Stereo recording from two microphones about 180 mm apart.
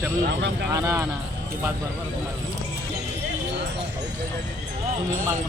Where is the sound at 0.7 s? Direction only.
15° right (ahead or behind).